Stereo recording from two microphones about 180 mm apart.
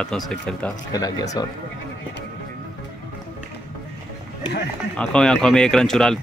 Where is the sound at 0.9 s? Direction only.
20° left (ahead or behind).